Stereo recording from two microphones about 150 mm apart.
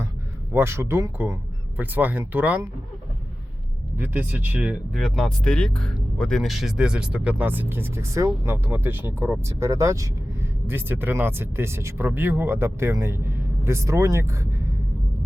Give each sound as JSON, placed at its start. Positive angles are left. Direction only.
{"t": 0.5, "sound": "speech", "side_deg": -15}
{"t": 3.9, "sound": "speech", "side_deg": -15}